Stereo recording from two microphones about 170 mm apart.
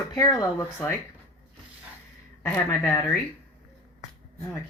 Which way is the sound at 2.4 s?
15° left (ahead or behind).